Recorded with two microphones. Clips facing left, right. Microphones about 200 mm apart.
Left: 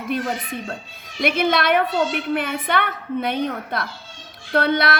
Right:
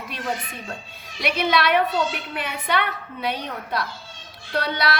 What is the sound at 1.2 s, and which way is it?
A woman's voice, 50° left (ahead or behind).